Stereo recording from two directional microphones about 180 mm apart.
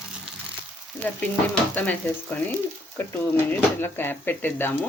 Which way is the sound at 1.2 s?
5° left (ahead or behind).